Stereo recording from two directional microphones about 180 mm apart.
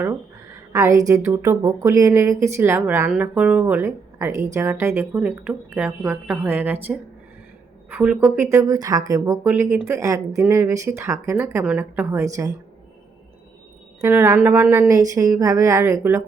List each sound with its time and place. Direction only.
0.7 s speech: 20° right (ahead or behind)
7.9 s speech: 10° right (ahead or behind)
14.0 s speech: 10° right (ahead or behind)